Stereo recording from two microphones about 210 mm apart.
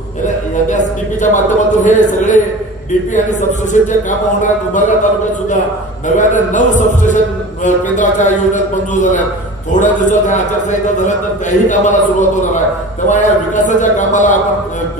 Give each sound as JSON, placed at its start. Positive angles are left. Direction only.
{"t": 0.7, "sound": "a man's voice", "side_deg": 35}
{"t": 6.0, "sound": "a man's voice", "side_deg": 35}
{"t": 11.6, "sound": "a man's voice", "side_deg": 35}